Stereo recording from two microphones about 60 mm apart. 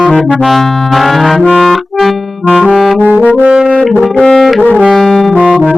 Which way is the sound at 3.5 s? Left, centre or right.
Centre.